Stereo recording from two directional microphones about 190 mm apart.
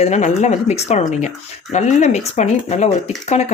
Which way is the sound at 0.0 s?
35° left (ahead or behind).